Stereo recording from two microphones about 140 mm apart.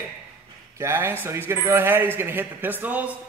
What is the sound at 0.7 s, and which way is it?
Speech, 20° right (ahead or behind).